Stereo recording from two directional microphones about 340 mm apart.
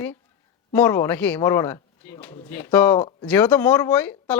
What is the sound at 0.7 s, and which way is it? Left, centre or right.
Speech, centre.